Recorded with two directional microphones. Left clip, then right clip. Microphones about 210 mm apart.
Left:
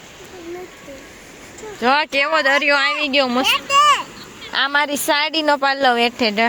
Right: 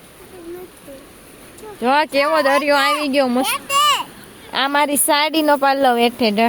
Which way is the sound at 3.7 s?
35° right (ahead or behind).